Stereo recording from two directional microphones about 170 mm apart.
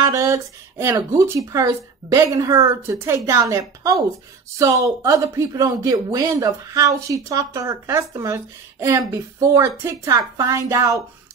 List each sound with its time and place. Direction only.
0.0 s speech: 20° right (ahead or behind)